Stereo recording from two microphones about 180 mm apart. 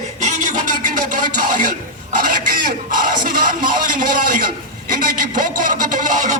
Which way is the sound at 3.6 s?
50° right (ahead or behind).